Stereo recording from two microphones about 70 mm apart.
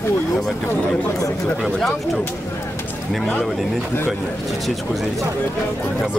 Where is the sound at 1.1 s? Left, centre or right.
Left.